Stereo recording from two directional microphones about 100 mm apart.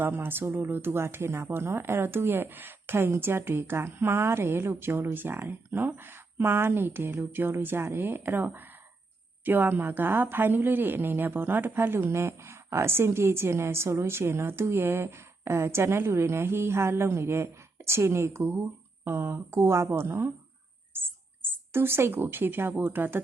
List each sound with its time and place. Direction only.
0.0 s speech: 20° right (ahead or behind)
20.9 s a sound: 20° right (ahead or behind)
22.8 s speech: 20° right (ahead or behind)